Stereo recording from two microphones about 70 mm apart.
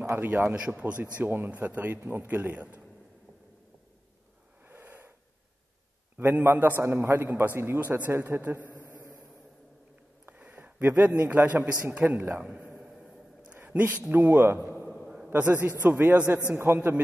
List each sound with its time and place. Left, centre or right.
0.1 s a man's voice: right
0.6 s speech: centre
1.1 s a man's voice: right
4.6 s wheeze: right
6.1 s a man's voice: right
10.2 s a sound: right
11.1 s a man's voice: right
12.8 s a sound: centre
13.6 s a man's voice: right
14.7 s a sound: right
15.2 s a man's voice: right